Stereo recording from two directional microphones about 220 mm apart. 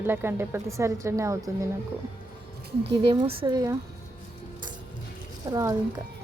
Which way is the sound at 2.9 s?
25° right (ahead or behind).